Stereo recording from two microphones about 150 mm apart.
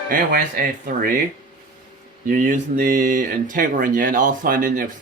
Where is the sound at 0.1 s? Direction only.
70° right (ahead or behind).